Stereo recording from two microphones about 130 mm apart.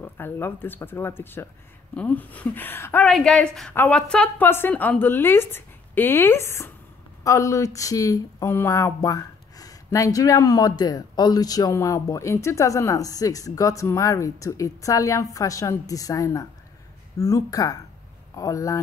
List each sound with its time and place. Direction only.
0.0 s a woman's voice: 15° left (ahead or behind)
3.1 s a woman's voice: 5° left (ahead or behind); by 18.8 s 25° left (ahead or behind)